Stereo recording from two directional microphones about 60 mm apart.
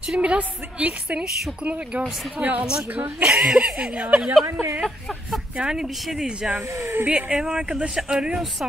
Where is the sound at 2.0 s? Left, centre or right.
Centre.